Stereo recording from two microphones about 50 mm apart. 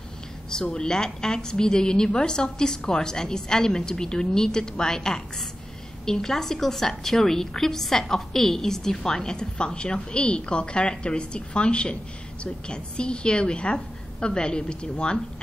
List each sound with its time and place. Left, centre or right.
0.5 s a woman's voice: centre